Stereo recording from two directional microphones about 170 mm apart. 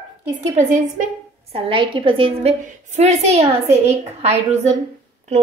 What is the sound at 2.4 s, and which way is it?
A woman's voice, 40° right (ahead or behind).